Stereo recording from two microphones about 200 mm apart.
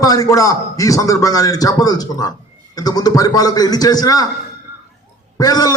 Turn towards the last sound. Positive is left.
turn(degrees=20)  # may be behind; listen again after turning